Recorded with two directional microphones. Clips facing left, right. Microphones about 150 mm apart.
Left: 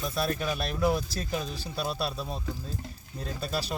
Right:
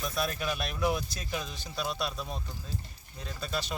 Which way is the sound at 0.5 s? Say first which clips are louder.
Left 3 dB; 35° left (ahead or behind).